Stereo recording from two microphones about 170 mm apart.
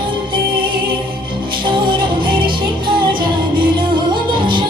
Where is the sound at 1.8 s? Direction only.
30° right (ahead or behind).